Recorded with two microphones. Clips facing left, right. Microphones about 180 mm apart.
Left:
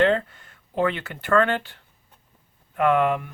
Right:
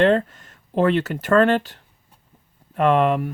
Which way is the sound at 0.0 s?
40° right (ahead or behind).